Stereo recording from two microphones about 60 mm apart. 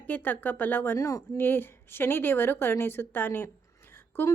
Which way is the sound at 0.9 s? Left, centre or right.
Left.